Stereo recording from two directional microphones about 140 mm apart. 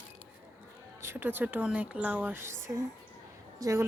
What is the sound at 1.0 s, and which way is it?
A woman's voice, 15° right (ahead or behind).